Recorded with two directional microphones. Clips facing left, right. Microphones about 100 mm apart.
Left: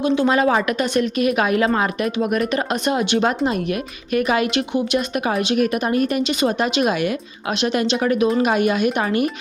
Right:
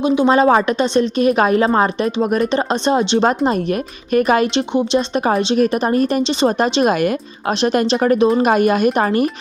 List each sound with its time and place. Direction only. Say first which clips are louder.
0.2 s a woman's voice: right 4 dB; 30° right (ahead or behind)
4.5 s a woman's voice: right 4 dB; 25° right (ahead or behind)